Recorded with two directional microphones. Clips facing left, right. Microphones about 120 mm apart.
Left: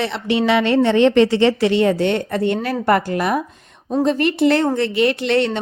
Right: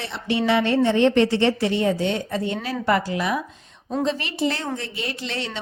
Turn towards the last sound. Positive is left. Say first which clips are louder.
# left 12 dB
turn(degrees=60)  # may be behind; listen again after turning